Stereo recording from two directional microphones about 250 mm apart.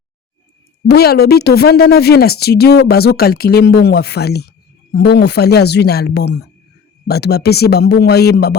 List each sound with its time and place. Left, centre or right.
0.9 s a woman's voice: left